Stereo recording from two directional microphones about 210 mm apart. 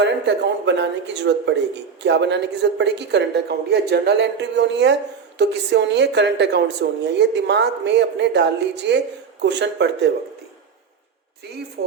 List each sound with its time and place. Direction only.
0.0 s speech: 55° right (ahead or behind)